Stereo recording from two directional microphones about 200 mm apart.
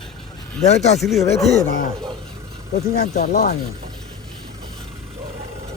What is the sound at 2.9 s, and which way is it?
Speech, 45° left (ahead or behind).